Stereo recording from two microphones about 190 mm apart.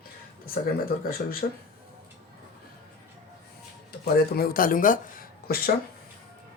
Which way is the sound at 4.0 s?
50° left (ahead or behind).